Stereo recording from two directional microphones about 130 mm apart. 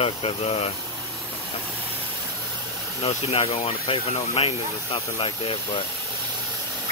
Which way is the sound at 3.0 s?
50° left (ahead or behind).